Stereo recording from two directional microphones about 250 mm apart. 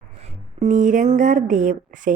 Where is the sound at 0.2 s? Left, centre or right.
Right.